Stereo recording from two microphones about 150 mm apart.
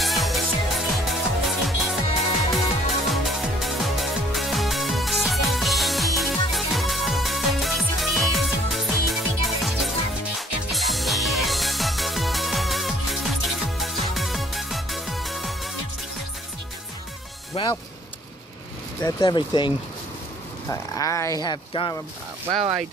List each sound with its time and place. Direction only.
0.0 s music: centre (ahead or behind)
17.6 s music: 40° left (ahead or behind)
19.0 s speech: 25° left (ahead or behind)
20.7 s speech: 20° left (ahead or behind)